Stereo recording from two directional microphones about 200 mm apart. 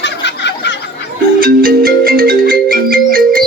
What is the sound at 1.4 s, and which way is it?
Music, 45° right (ahead or behind).